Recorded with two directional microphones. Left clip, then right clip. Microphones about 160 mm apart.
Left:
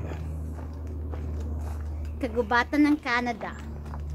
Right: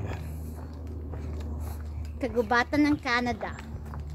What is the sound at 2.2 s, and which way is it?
Speech, 80° right.